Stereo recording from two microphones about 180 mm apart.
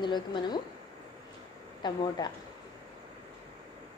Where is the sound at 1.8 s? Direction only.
25° left (ahead or behind).